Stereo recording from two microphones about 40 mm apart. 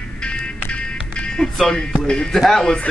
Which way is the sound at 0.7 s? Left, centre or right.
Left.